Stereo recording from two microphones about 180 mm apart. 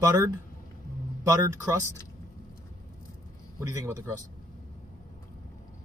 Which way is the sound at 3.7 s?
15° right (ahead or behind).